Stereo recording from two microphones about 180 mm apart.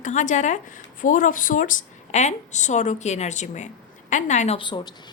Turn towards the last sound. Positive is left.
turn(degrees=25)  # may be behind; listen again after turning